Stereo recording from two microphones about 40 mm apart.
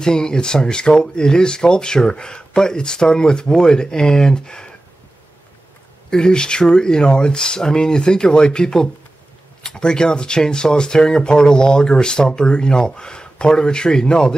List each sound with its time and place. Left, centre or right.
0.0 s speech: centre
6.0 s speech: centre